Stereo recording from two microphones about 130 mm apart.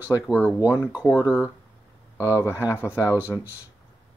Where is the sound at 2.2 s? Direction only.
15° right (ahead or behind).